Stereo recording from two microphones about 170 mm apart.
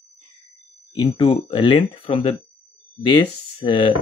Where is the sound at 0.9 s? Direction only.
30° left (ahead or behind).